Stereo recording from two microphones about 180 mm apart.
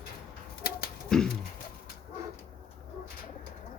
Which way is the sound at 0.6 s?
55° left (ahead or behind).